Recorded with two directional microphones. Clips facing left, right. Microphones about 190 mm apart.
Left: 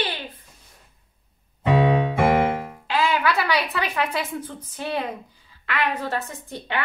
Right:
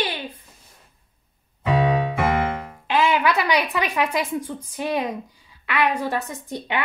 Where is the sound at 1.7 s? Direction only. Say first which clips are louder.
Left 1 dB; 25° left (ahead or behind).